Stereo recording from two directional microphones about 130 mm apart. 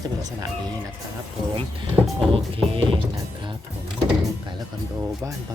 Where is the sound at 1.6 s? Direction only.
45° right (ahead or behind).